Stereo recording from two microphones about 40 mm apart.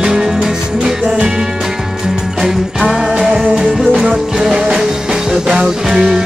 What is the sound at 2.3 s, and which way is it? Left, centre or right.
Music, centre.